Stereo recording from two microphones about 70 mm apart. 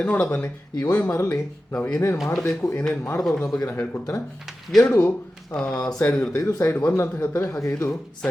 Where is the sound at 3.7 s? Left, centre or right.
Left.